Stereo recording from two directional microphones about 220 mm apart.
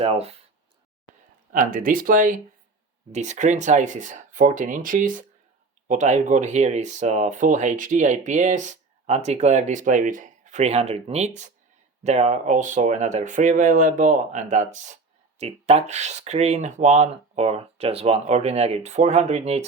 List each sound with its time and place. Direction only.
0.0 s speech: 25° right (ahead or behind)
1.5 s speech: 40° right (ahead or behind)